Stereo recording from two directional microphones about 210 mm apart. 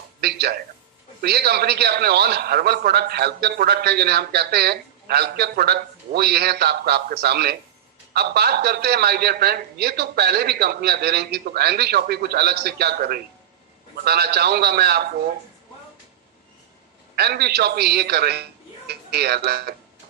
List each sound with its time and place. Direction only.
0.2 s a sound: 50° right (ahead or behind)
1.2 s a man's voice: 50° right (ahead or behind)
17.2 s a man's voice: 50° right (ahead or behind)